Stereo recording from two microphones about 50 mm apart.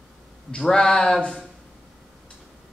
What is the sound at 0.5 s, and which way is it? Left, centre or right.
Speech, centre.